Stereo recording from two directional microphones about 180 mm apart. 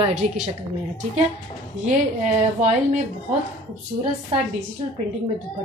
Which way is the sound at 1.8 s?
40° right (ahead or behind).